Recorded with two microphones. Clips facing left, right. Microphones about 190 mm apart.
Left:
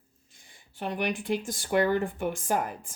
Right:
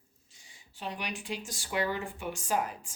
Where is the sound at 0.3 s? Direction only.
55° left (ahead or behind).